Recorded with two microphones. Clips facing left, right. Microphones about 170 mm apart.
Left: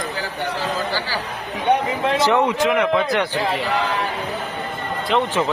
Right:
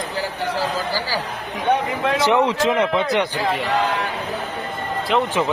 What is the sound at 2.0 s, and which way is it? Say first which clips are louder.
Speech: left 1 dB; 25° left (ahead or behind).